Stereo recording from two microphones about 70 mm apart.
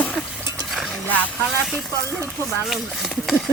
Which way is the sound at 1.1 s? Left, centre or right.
Left.